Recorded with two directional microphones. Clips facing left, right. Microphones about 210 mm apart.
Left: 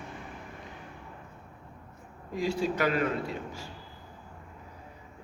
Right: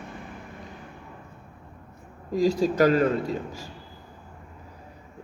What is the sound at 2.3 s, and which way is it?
A man's voice, 40° right (ahead or behind).